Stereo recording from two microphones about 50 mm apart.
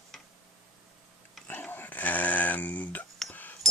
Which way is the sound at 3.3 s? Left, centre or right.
Left.